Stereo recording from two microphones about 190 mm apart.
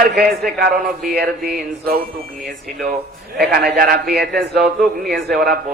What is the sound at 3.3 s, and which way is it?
A man's voice, 55° right (ahead or behind).